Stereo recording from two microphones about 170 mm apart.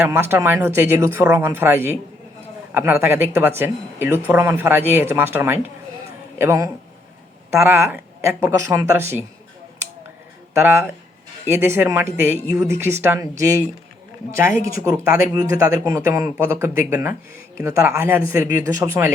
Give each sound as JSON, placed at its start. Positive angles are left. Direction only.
{"t": 0.0, "sound": "speech", "side_deg": -15}
{"t": 10.5, "sound": "speech", "side_deg": -15}
{"t": 15.1, "sound": "speech", "side_deg": -20}